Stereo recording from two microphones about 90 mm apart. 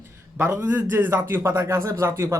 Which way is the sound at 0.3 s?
25° right (ahead or behind).